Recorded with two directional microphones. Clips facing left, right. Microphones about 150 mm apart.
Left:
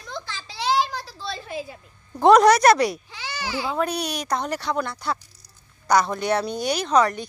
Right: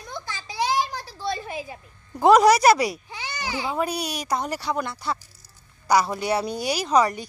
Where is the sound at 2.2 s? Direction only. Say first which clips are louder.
Left 1 dB; 5° right (ahead or behind).